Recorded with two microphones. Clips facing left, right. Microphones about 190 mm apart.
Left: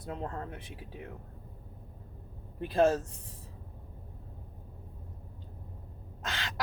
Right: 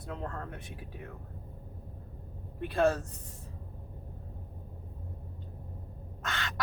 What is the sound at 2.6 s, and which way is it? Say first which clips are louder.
Speech: left 2 dB; 25° left (ahead or behind).